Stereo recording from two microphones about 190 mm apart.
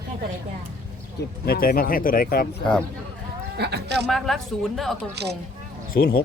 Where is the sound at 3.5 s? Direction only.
60° right (ahead or behind).